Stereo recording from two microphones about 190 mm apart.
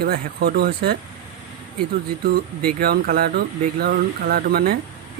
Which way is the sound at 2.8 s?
55° right (ahead or behind).